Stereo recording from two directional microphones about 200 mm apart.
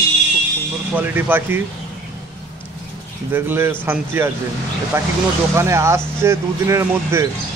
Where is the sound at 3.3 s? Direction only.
10° right (ahead or behind).